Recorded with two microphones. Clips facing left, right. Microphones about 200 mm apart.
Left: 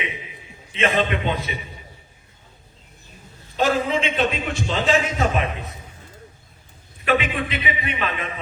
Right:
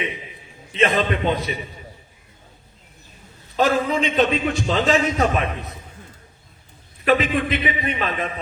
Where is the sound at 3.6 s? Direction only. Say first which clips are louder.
Right 1 dB; 40° right (ahead or behind).